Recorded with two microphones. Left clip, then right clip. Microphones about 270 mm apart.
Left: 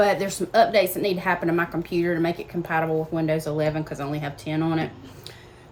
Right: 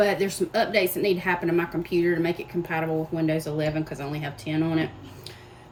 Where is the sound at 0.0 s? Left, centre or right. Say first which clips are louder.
Left 2 dB; centre.